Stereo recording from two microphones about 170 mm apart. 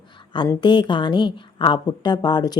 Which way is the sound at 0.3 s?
20° left (ahead or behind).